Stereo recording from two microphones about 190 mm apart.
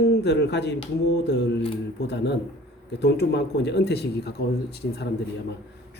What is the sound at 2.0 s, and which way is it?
Speech, 65° left (ahead or behind).